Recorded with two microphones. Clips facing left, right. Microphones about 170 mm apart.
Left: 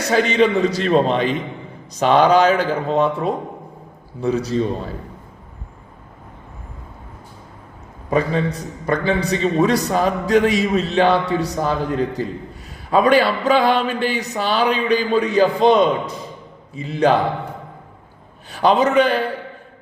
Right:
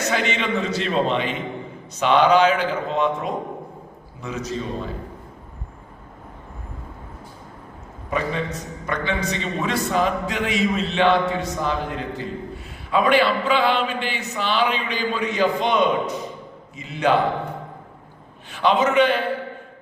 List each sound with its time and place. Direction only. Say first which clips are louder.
0.1 s a man's voice: left 10 dB; 40° left (ahead or behind)
8.1 s a man's voice: left 6 dB; 35° left (ahead or behind)
18.5 s a man's voice: left 3 dB; 40° left (ahead or behind)